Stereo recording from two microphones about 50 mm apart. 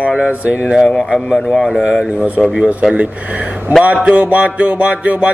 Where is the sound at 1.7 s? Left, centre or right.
Centre.